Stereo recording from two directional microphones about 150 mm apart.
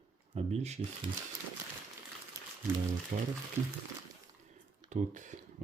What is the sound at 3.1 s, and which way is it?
Speech, 60° right (ahead or behind).